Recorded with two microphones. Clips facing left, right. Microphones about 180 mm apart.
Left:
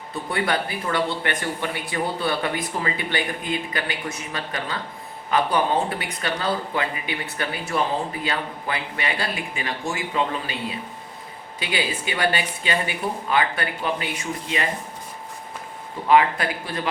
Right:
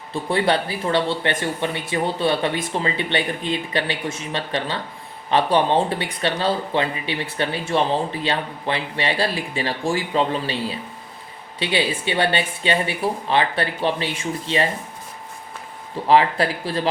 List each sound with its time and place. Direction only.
0.1 s speech: 30° right (ahead or behind)
16.0 s speech: 30° right (ahead or behind)